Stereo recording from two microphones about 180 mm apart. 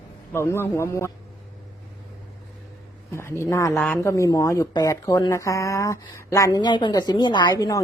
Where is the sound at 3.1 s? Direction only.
15° left (ahead or behind).